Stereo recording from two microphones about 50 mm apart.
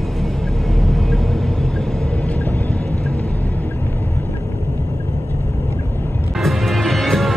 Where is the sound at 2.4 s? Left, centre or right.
Left.